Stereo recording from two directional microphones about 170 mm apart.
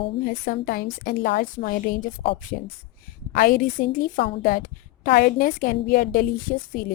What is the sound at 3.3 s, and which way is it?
A woman's voice, 55° left (ahead or behind).